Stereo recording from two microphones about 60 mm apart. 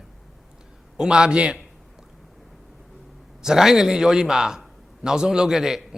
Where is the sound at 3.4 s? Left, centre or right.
Centre.